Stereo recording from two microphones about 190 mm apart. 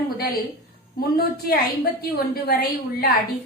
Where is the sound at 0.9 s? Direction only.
55° left (ahead or behind).